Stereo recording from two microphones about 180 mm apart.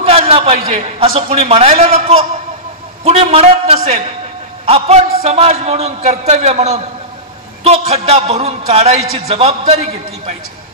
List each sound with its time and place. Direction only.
0.0 s a man's voice: 35° right (ahead or behind)
7.9 s a man's voice: 35° right (ahead or behind)